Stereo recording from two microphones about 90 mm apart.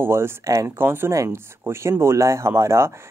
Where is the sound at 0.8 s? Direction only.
25° right (ahead or behind).